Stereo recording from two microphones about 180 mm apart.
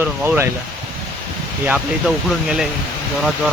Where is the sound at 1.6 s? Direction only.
5° right (ahead or behind).